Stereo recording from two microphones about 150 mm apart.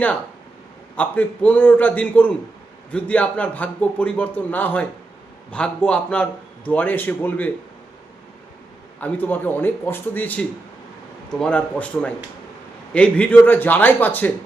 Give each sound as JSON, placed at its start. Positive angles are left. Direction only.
{"t": 0.9, "sound": "a man's voice", "side_deg": 10}
{"t": 9.0, "sound": "a man's voice", "side_deg": 10}